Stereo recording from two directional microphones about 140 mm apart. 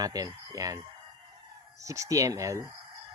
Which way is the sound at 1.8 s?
25° right (ahead or behind).